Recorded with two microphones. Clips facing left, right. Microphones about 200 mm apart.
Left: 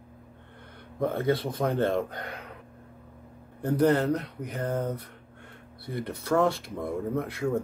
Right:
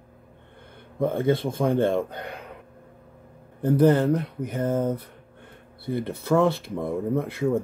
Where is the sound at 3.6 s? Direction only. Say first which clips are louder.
Right 4 dB; 25° right (ahead or behind).